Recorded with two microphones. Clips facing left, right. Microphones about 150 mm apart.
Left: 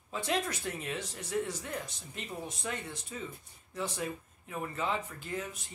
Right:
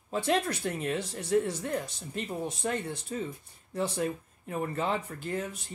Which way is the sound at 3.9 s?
45° right (ahead or behind).